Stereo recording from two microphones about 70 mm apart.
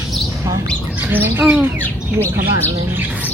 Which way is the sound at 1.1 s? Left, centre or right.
Right.